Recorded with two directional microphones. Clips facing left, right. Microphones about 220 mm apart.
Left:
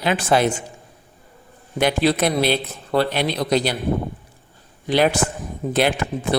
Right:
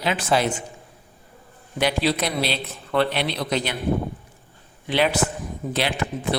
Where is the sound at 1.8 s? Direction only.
50° left (ahead or behind).